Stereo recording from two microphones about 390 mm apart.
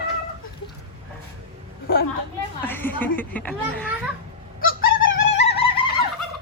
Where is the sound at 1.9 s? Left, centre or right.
Left.